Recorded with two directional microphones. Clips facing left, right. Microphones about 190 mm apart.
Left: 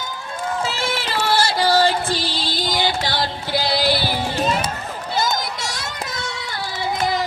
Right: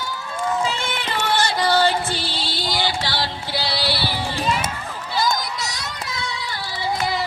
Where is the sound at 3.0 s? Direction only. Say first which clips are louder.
Left 2 dB; 45° left (ahead or behind).